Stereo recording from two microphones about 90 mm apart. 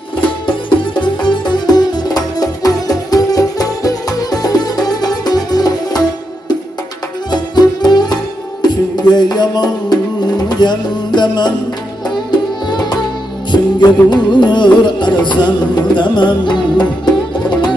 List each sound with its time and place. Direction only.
1.2 s music: 55° left (ahead or behind)
7.2 s music: 50° left (ahead or behind)
12.6 s tabla: 50° left (ahead or behind)
13.5 s music: 55° left (ahead or behind)